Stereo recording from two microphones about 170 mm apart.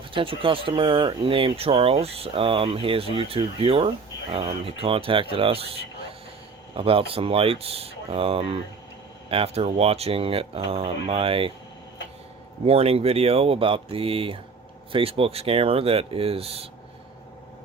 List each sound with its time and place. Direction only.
0.1 s speech: 30° right (ahead or behind)
12.6 s speech: 35° right (ahead or behind)